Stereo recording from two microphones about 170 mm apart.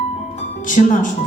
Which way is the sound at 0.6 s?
50° left (ahead or behind).